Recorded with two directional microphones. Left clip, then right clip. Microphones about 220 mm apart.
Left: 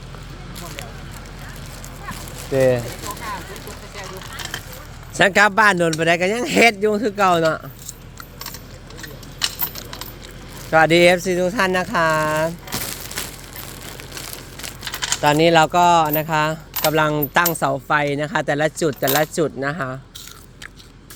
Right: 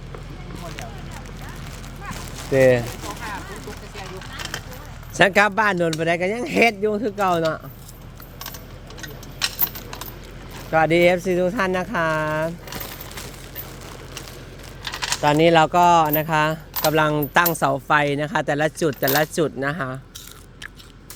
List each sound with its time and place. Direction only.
2.5 s speech: 5° right (ahead or behind)
5.1 s speech: 10° left (ahead or behind)
10.7 s speech: 15° left (ahead or behind)
11.3 s speech: centre (ahead or behind)
14.9 s speech: 5° right (ahead or behind)